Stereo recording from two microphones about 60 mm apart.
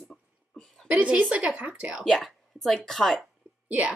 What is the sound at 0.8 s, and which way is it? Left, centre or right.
Speech, right.